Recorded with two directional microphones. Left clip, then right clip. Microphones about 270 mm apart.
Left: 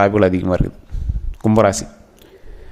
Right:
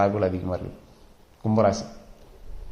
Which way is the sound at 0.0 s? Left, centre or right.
Left.